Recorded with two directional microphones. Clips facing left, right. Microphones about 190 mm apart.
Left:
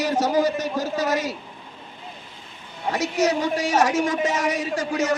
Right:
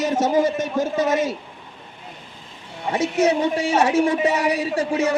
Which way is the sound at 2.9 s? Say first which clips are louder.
Right 3 dB; 25° right (ahead or behind).